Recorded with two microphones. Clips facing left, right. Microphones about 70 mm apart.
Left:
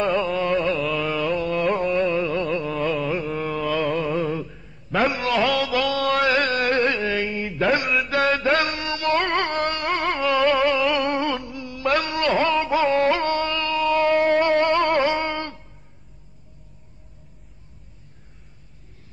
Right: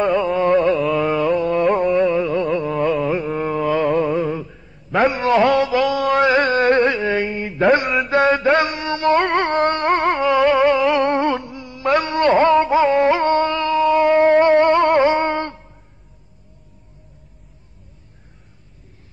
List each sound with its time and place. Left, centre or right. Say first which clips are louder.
0.0 s carnatic music: right 4 dB; centre
0.9 s carnatic music: right 6 dB; right
2.0 s music: right 5 dB; centre
2.6 s carnatic music: right 5 dB; right
4.0 s a sound: right 4 dB; centre
5.2 s music: right 6 dB; right
7.8 s mantra: right 4 dB; centre
8.1 s music: right 6 dB; right
10.2 s music: right 3 dB; centre
13.9 s a sound: right 3 dB; centre
14.3 s music: right 6 dB; right